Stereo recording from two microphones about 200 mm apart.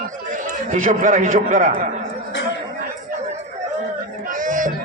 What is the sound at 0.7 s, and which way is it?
A man's voice, 40° right (ahead or behind).